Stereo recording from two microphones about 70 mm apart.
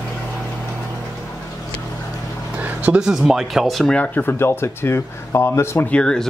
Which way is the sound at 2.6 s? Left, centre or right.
Right.